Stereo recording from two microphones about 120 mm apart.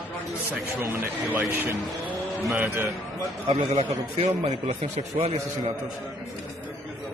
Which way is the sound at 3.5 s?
55° right (ahead or behind).